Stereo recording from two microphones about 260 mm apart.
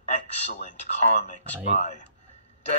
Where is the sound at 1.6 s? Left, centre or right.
Left.